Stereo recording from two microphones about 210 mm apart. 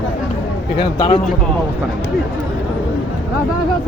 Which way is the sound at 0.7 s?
25° left (ahead or behind).